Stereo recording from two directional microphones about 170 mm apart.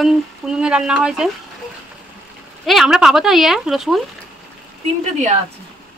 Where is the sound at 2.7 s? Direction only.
Centre (ahead or behind).